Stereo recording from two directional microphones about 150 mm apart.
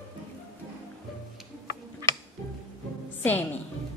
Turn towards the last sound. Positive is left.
turn(degrees=10)  # may be behind; listen again after turning